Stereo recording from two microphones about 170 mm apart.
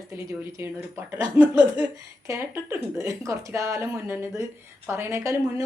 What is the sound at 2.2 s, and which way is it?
A woman's voice, 15° right (ahead or behind).